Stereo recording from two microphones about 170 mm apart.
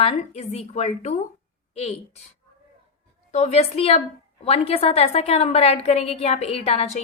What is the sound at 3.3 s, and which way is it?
A woman's voice, 40° left (ahead or behind).